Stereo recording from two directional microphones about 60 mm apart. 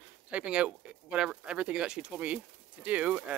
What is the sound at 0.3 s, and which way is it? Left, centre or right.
Speech, centre.